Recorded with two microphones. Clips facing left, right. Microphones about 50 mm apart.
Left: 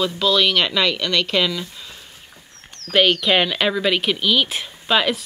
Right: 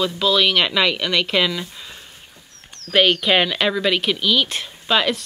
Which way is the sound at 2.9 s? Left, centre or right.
Centre.